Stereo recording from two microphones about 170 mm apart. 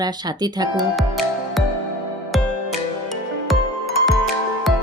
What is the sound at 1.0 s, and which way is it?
Music, centre (ahead or behind).